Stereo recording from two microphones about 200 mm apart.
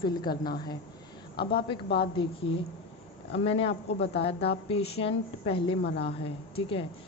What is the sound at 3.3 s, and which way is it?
A woman's voice, 30° left (ahead or behind).